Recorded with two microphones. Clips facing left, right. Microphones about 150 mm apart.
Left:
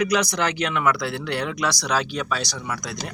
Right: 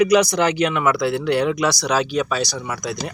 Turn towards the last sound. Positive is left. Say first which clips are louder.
# right 4 dB
turn(degrees=-10)  # may be behind; listen again after turning